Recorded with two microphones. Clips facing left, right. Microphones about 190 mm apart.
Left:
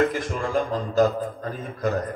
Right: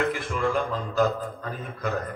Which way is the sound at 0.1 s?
40° left (ahead or behind).